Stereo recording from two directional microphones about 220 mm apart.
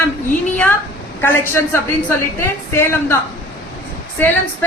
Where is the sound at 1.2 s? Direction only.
10° left (ahead or behind).